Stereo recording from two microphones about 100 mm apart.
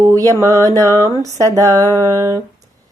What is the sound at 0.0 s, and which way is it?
A woman's voice, 35° right (ahead or behind).